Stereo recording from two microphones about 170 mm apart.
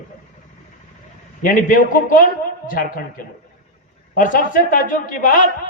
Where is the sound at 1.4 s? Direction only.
55° left (ahead or behind).